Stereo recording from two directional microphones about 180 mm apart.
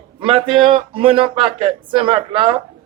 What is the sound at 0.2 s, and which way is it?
Speech, 30° right (ahead or behind).